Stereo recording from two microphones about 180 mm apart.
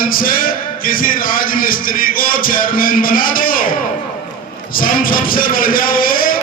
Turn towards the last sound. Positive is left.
turn(degrees=50)  # may be behind; listen again after turning